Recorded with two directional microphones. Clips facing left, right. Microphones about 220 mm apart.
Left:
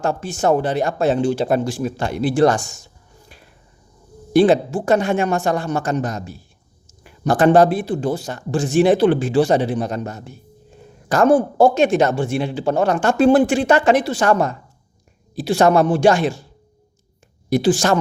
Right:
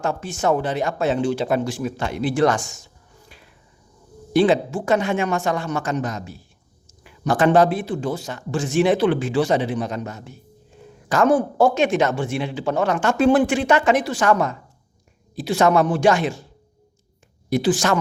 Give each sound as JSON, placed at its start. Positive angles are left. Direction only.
{"t": 0.0, "sound": "a man's voice", "side_deg": 35}
{"t": 3.2, "sound": "a sound", "side_deg": 45}
{"t": 4.3, "sound": "a man's voice", "side_deg": 45}
{"t": 17.5, "sound": "a man's voice", "side_deg": 30}